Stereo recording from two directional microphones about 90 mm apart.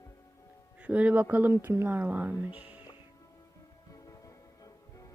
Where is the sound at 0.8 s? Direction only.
15° right (ahead or behind).